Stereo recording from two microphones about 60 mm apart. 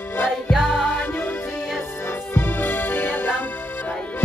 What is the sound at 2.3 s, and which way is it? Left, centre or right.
Music, left.